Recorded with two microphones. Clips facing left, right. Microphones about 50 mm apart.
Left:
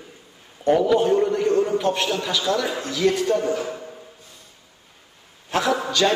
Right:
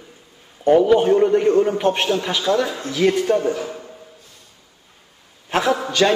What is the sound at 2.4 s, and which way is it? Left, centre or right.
A man's voice, right.